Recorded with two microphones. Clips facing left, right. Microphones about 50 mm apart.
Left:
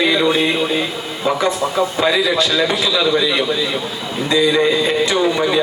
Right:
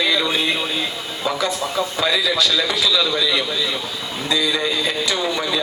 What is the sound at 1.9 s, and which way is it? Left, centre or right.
A man's voice, left.